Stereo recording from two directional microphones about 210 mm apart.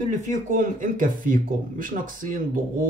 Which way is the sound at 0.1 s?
35° right (ahead or behind).